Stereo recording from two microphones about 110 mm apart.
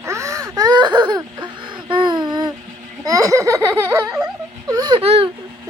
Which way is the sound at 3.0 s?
30° right (ahead or behind).